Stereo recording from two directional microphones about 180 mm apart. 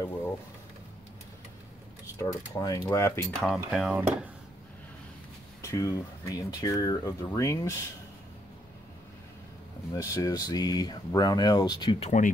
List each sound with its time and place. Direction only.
2.1 s cutlery: 20° left (ahead or behind)
3.4 s speech: centre (ahead or behind)
5.6 s speech: 15° left (ahead or behind)
9.9 s speech: 20° left (ahead or behind)